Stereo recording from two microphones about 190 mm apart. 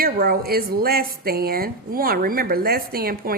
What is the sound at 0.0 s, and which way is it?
A woman's voice, 50° right (ahead or behind).